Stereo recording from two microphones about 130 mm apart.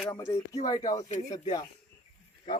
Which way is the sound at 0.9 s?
60° left (ahead or behind).